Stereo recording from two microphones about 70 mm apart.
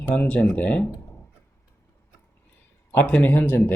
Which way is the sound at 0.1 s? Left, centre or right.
Centre.